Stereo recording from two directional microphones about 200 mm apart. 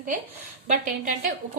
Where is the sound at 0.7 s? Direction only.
40° right (ahead or behind).